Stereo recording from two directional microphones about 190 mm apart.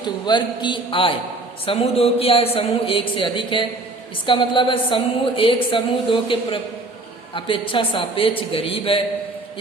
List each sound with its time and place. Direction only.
0.3 s a woman's voice: 25° left (ahead or behind)